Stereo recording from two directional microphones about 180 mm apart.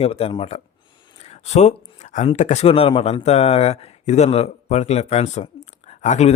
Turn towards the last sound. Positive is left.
turn(degrees=40)  # may be behind; listen again after turning